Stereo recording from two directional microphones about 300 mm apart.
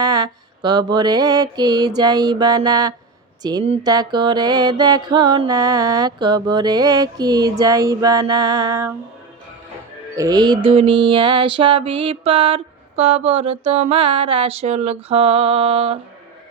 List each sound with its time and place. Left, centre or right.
0.0 s mantra: centre
10.2 s mantra: centre